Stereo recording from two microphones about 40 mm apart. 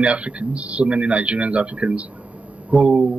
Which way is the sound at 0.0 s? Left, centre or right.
Right.